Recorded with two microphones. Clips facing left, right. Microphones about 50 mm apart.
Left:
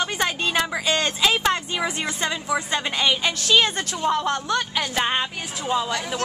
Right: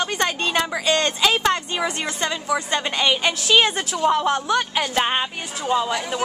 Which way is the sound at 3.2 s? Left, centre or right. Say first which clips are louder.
Right 2 dB; centre.